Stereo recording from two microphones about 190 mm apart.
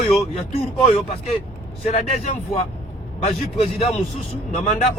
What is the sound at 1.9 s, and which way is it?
Speech, 35° left (ahead or behind).